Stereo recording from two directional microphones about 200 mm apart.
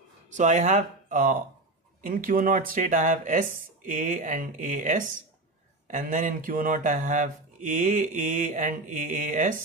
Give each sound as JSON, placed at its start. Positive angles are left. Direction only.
{"t": 0.4, "sound": "mantra", "side_deg": -35}